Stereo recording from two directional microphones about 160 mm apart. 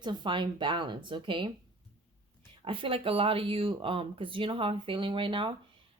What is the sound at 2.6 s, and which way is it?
A woman's voice, 35° right (ahead or behind).